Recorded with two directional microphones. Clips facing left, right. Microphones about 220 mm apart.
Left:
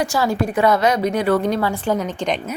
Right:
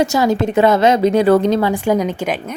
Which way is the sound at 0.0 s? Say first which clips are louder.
Right 5 dB; 20° right (ahead or behind).